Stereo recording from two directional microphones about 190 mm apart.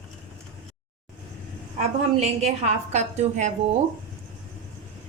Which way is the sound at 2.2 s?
35° right (ahead or behind).